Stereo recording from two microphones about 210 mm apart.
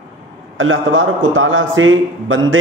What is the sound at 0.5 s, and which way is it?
A man's voice, 70° right (ahead or behind).